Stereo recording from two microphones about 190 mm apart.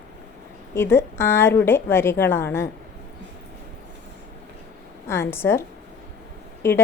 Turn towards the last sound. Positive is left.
turn(degrees=15)  # may be behind; listen again after turning